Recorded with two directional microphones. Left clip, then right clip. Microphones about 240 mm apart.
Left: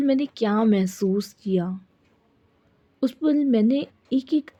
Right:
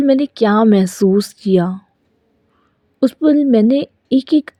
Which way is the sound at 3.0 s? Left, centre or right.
Right.